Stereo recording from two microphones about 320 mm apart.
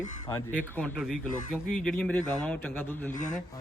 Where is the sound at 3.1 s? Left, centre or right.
Left.